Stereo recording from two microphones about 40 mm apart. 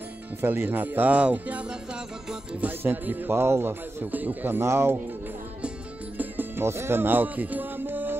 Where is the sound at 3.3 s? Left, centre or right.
Right.